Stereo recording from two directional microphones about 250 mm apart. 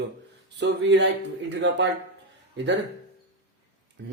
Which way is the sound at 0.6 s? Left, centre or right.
Right.